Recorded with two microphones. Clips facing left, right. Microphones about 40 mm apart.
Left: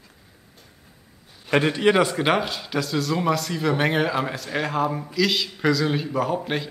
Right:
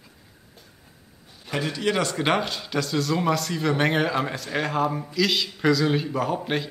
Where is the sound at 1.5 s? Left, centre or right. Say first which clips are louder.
Left 7 dB; left.